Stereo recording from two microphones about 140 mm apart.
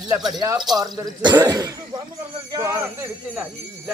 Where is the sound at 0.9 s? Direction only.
30° right (ahead or behind).